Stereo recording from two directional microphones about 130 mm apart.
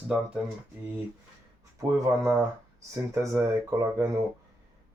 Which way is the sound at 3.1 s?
25° right (ahead or behind).